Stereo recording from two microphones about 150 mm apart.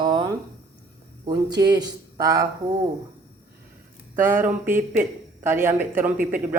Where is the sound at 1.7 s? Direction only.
25° right (ahead or behind).